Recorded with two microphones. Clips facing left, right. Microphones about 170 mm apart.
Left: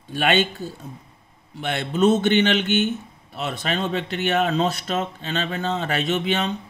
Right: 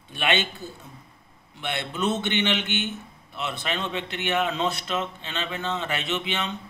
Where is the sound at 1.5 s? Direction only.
45° left (ahead or behind).